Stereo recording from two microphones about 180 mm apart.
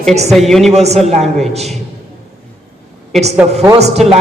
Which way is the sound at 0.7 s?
35° right (ahead or behind).